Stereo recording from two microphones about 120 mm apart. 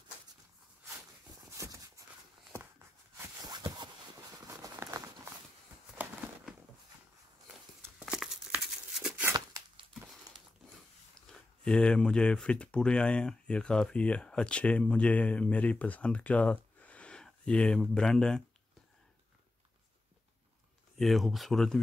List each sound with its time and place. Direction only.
1.6 s clip-clop: 25° right (ahead or behind)
3.2 s a sound: 30° right (ahead or behind)
4.7 s a sound: 20° right (ahead or behind)
8.0 s crumpling: centre (ahead or behind)
11.6 s speech: 10° left (ahead or behind)
21.0 s speech: centre (ahead or behind)